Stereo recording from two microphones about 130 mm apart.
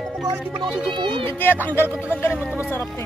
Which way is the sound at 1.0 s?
40° right (ahead or behind).